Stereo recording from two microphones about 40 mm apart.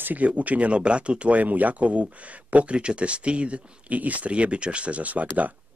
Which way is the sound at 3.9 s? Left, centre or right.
Right.